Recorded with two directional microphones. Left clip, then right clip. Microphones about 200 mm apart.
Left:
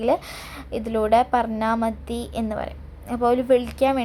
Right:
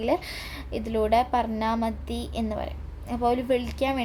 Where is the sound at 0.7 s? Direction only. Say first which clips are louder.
Left 4 dB; 10° left (ahead or behind).